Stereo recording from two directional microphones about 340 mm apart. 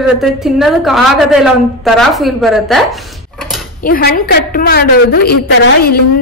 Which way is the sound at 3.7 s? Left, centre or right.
Left.